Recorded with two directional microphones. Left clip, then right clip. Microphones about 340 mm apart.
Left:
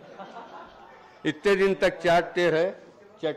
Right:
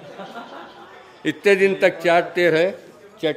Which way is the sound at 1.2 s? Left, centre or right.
Left.